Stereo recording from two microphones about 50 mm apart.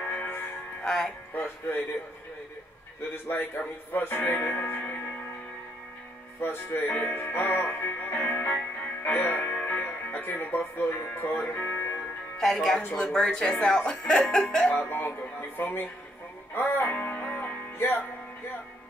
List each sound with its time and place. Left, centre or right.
0.0 s music: left
0.8 s speech: centre
1.3 s music: left
3.3 s music: left
6.4 s speech: left
6.9 s music: left
11.1 s speech: left
12.4 s speech: centre
14.7 s music: left
17.7 s music: left